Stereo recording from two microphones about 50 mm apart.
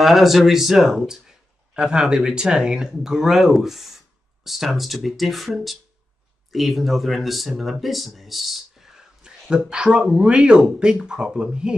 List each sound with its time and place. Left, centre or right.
0.0 s speech: centre